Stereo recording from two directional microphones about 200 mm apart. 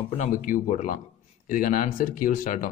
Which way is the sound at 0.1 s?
35° left (ahead or behind).